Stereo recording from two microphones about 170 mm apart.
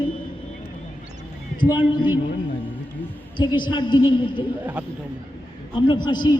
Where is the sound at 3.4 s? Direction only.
25° left (ahead or behind).